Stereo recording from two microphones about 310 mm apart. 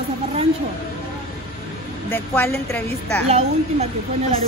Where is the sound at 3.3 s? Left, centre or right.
Right.